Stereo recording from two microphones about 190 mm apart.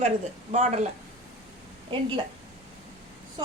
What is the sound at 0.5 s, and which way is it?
Speech, 40° right (ahead or behind).